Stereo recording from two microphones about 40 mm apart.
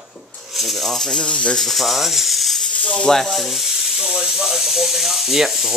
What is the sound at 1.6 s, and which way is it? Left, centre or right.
Sizzle, centre.